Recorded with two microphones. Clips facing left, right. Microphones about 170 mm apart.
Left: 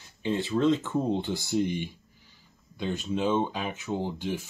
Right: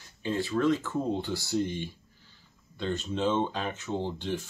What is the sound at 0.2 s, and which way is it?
Speech, 20° left (ahead or behind).